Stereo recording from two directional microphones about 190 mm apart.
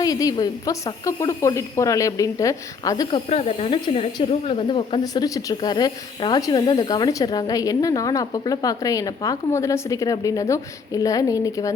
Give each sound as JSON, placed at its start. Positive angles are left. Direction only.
{"t": 0.0, "sound": "speech", "side_deg": 20}
{"t": 3.2, "sound": "speech", "side_deg": 30}